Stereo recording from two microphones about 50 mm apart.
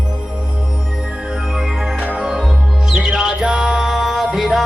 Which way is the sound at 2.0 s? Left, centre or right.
Right.